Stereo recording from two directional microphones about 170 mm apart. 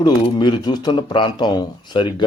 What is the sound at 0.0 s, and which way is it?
A man's voice, 25° left (ahead or behind).